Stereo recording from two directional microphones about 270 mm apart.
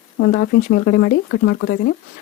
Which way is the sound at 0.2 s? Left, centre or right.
Left.